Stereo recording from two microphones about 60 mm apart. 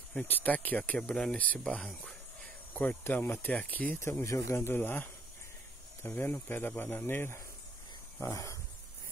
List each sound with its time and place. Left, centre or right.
0.1 s speech: left
4.2 s speech: left
6.0 s speech: left
8.2 s wild animals: left